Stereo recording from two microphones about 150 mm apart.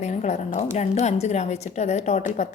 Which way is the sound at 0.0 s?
50° left (ahead or behind).